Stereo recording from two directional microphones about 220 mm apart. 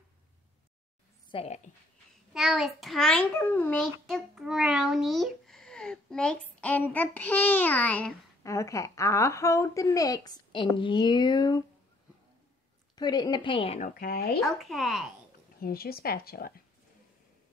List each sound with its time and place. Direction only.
1.3 s a woman's voice: 30° left (ahead or behind)
2.3 s a child's voice: centre (ahead or behind); by 11.6 s 20° left (ahead or behind)
12.9 s a woman's voice: 20° left (ahead or behind)
13.9 s speech: 45° left (ahead or behind)
14.6 s speech: centre (ahead or behind)
15.6 s speech: 45° left (ahead or behind)